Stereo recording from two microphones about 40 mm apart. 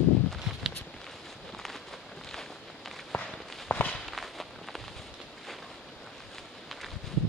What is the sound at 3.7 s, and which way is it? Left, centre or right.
Walk, left.